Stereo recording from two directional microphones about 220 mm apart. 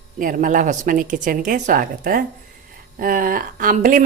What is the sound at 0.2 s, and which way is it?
Speech, 35° right (ahead or behind).